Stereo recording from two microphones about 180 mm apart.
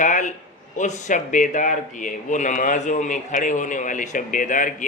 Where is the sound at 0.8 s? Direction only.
45° left (ahead or behind).